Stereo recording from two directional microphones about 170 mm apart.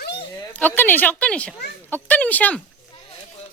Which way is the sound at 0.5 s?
10° left (ahead or behind).